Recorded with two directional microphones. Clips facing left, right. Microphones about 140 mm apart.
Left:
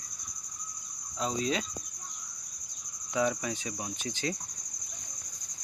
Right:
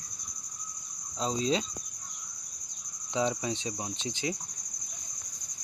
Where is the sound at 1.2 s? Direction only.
30° right (ahead or behind).